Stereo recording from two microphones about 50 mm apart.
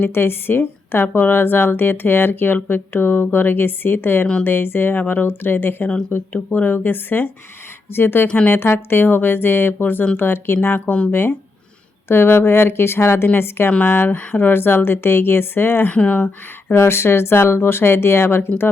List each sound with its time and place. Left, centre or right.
0.0 s a woman's voice: left
10.8 s speech: left
11.1 s a woman's voice: left
13.7 s a woman's voice: left
15.9 s speech: left
16.7 s a woman's voice: left